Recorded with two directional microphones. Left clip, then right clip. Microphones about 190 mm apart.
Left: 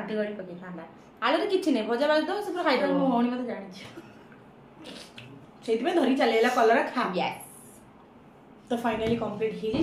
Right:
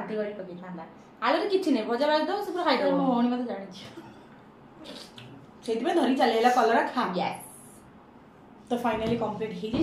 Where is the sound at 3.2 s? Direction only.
5° right (ahead or behind).